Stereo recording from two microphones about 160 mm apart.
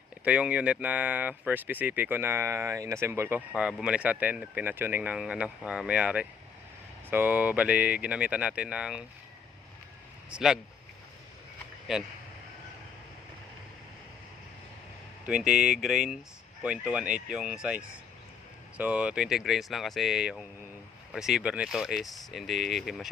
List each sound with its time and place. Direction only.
0.3 s speech: 5° right (ahead or behind)
10.2 s speech: 5° right (ahead or behind)
11.9 s speech: centre (ahead or behind)
15.3 s speech: 5° right (ahead or behind)